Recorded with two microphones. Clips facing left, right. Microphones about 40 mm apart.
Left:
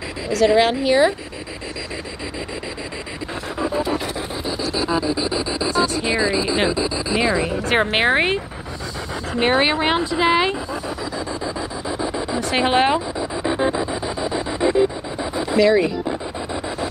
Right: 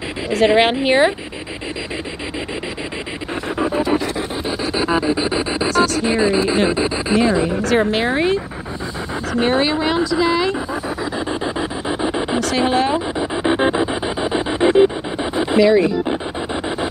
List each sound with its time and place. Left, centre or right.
0.3 s speech: right
3.5 s pant: right
4.5 s rub: right
6.0 s speech: right
7.6 s speech: left
11.4 s a sound: right
12.4 s speech: left
13.2 s music: right
15.6 s speech: centre